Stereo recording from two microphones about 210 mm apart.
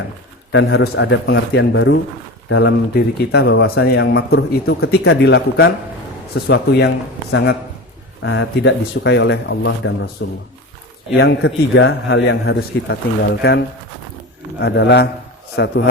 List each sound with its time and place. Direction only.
0.5 s a man's voice: 55° left (ahead or behind)
11.2 s a man's voice: 55° left (ahead or behind)
14.6 s a man's voice: 55° left (ahead or behind)